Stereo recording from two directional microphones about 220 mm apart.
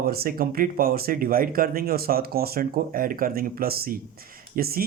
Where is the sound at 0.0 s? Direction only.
45° right (ahead or behind).